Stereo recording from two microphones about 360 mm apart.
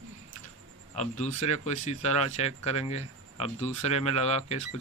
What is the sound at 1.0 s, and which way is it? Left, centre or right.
Speech, centre.